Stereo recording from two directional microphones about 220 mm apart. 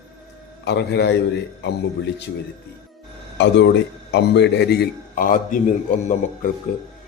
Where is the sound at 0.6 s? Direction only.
50° left (ahead or behind).